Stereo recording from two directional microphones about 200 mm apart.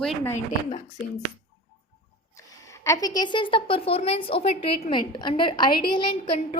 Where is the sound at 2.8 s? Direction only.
15° left (ahead or behind).